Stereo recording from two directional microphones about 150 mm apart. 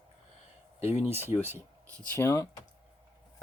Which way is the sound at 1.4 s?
20° right (ahead or behind).